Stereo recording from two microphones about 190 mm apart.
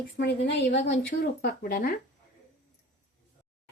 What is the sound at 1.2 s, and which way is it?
Speech, 55° left (ahead or behind).